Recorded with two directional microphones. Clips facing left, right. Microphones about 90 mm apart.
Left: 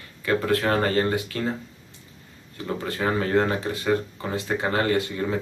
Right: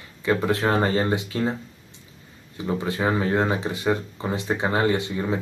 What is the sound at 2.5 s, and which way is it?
Speech, 15° right (ahead or behind).